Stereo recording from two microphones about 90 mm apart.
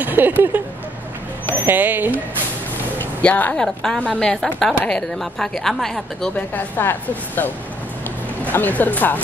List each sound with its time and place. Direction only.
0.0 s a sound: 20° right (ahead or behind)
1.5 s speech: 20° right (ahead or behind)
3.0 s vehicle: 15° left (ahead or behind)
3.6 s a woman's voice: 5° left (ahead or behind)
6.3 s speech: 20° left (ahead or behind)